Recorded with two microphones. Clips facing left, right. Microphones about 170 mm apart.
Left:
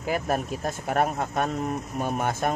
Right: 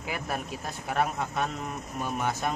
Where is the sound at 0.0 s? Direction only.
45° left (ahead or behind).